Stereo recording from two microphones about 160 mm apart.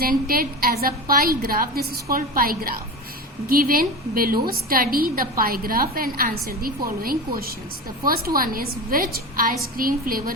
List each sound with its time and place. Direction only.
0.0 s a woman's voice: 65° right (ahead or behind)